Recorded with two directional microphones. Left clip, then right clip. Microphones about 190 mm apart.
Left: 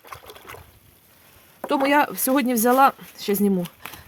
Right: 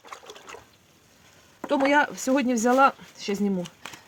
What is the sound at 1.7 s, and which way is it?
Speech, 75° left (ahead or behind).